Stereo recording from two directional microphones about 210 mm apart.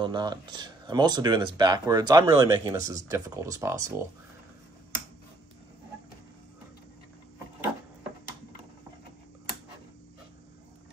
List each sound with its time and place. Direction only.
0.0 s speech: 20° right (ahead or behind)